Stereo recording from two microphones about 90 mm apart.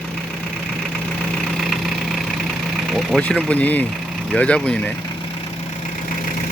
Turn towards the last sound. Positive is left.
turn(degrees=10)  # may be behind; listen again after turning